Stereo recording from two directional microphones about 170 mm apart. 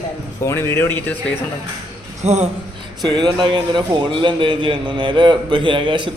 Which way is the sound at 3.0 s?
25° right (ahead or behind).